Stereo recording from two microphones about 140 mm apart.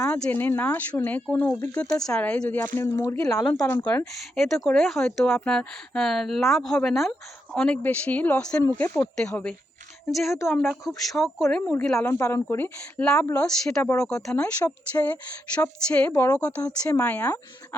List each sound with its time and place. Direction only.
0.1 s speech: 10° left (ahead or behind)
4.0 s speech: centre (ahead or behind)
8.6 s speech: 20° left (ahead or behind)
9.1 s speech: 5° left (ahead or behind)
16.6 s speech: 30° left (ahead or behind)
17.0 s speech: 10° left (ahead or behind)